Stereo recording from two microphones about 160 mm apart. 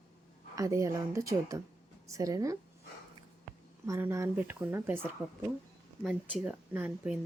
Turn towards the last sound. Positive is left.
turn(degrees=-10)  # may be behind; listen again after turning